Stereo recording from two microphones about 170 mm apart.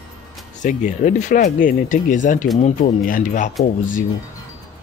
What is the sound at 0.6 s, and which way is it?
Speech, 50° left (ahead or behind).